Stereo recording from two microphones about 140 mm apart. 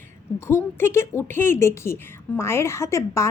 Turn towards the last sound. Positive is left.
turn(degrees=20)  # may be behind; listen again after turning